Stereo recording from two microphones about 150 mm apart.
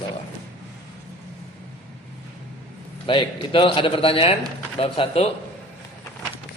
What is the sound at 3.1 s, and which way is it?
Speech, 35° left (ahead or behind).